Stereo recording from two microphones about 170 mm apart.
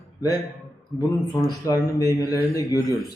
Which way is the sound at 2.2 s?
20° left (ahead or behind).